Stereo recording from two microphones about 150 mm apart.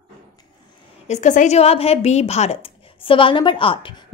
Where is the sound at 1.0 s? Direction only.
50° left (ahead or behind).